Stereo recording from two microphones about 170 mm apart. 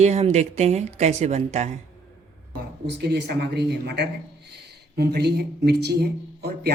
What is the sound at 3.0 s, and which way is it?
A man's voice, 75° right (ahead or behind).